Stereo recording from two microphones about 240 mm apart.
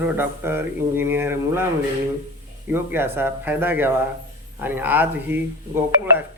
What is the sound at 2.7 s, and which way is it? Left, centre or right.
Speech, centre.